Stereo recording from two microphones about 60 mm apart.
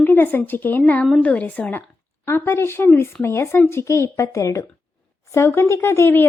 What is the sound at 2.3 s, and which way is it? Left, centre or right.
A woman's voice, left.